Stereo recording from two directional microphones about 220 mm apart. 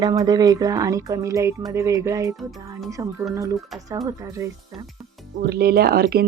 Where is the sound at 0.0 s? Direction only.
20° right (ahead or behind).